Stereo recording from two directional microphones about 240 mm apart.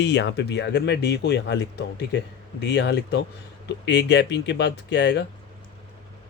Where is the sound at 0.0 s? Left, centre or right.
Left.